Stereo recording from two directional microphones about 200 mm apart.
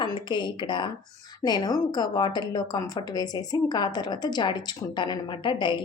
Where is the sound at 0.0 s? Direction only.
25° left (ahead or behind).